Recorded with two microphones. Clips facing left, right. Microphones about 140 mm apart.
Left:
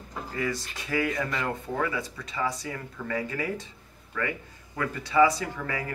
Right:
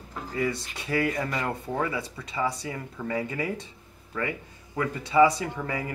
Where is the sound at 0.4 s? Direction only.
25° right (ahead or behind).